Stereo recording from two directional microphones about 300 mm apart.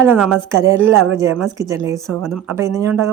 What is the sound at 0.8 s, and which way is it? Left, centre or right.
Speech, right.